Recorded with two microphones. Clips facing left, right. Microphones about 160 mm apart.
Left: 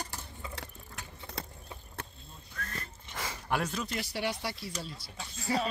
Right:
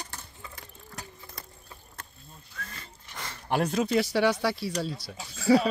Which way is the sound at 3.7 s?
80° right.